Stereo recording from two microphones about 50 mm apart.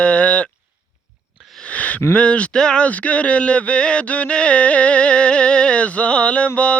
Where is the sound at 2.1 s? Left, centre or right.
Left.